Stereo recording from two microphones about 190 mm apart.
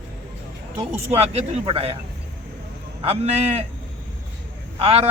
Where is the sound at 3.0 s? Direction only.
35° right (ahead or behind).